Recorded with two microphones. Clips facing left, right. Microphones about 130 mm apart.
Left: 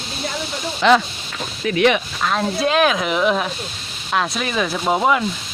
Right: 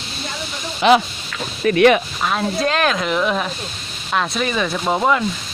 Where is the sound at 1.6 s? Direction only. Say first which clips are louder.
Right 4 dB; 50° right (ahead or behind).